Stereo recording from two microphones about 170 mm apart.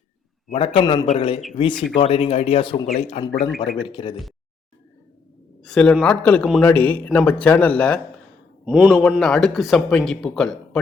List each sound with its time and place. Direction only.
0.5 s speech: 30° left (ahead or behind)
5.6 s speech: 5° left (ahead or behind)
8.6 s a man's voice: 5° right (ahead or behind)
9.0 s speech: 5° left (ahead or behind)